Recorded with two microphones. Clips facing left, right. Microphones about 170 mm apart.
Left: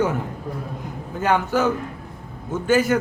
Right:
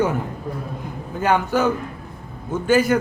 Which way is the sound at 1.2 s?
15° right (ahead or behind).